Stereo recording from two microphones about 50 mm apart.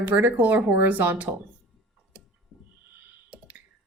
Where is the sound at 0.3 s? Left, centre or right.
Right.